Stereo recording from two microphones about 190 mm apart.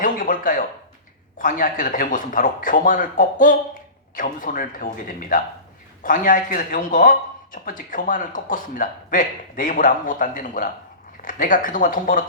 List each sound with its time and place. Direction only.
0.0 s speech: 45° left (ahead or behind)